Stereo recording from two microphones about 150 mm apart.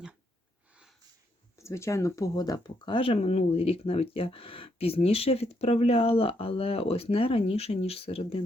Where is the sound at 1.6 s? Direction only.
20° left (ahead or behind).